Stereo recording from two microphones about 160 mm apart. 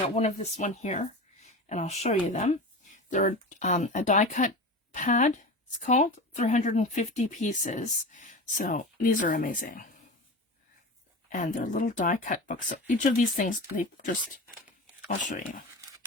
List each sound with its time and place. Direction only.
0.1 s speech: 45° left (ahead or behind)
11.3 s speech: 50° left (ahead or behind)
15.4 s speech: 60° left (ahead or behind)